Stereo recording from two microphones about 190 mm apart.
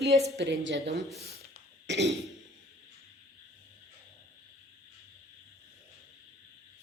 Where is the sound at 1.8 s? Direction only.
65° right (ahead or behind).